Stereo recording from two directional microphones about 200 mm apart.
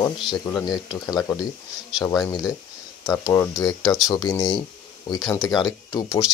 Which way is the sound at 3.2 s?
15° left (ahead or behind).